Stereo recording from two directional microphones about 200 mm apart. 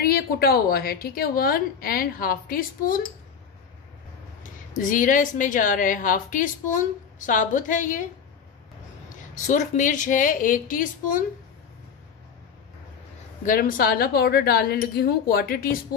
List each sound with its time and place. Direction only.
0.0 s a woman's voice: 50° left (ahead or behind)
4.4 s a woman's voice: 40° left (ahead or behind)
9.3 s a woman's voice: 40° left (ahead or behind)
13.4 s a woman's voice: 45° left (ahead or behind)